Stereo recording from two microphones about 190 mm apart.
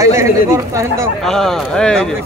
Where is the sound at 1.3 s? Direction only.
Centre (ahead or behind).